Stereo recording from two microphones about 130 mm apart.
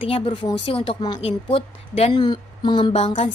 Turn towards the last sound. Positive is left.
turn(degrees=45)  # may be behind; listen again after turning